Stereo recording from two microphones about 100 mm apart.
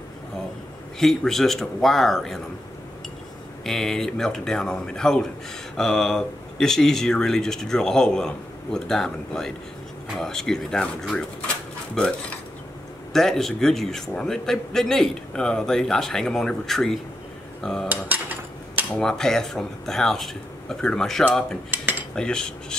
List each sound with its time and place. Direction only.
0.9 s a man's voice: 5° left (ahead or behind)
3.6 s a man's voice: 5° left (ahead or behind)
13.1 s a man's voice: 5° left (ahead or behind)
17.8 s cutlery: 20° right (ahead or behind)
18.9 s a man's voice: 5° left (ahead or behind)
22.1 s cutlery: 10° left (ahead or behind)